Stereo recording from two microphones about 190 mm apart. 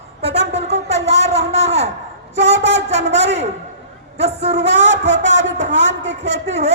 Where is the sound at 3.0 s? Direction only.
70° right (ahead or behind).